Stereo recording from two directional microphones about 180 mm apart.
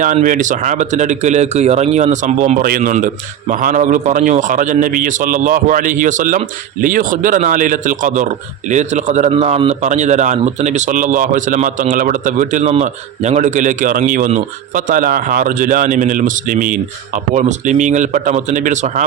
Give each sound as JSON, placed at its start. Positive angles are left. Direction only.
{"t": 0.0, "sound": "a man's voice", "side_deg": -45}